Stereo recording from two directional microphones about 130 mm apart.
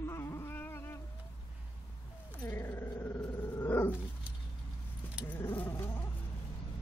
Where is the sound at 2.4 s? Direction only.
20° left (ahead or behind).